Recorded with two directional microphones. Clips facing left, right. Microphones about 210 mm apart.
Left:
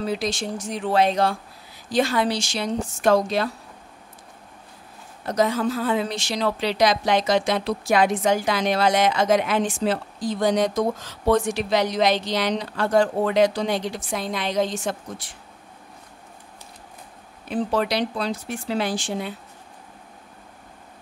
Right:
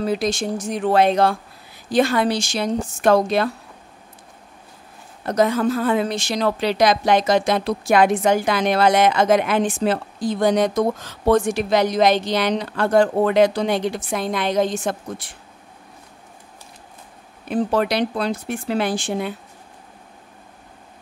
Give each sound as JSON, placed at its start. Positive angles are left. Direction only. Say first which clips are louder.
{"t": 0.0, "sound": "a woman's voice", "louder": "right 4 dB", "side_deg": -50}
{"t": 5.2, "sound": "a woman's voice", "louder": "right 3 dB", "side_deg": -55}
{"t": 17.5, "sound": "a woman's voice", "louder": "right 3 dB", "side_deg": -50}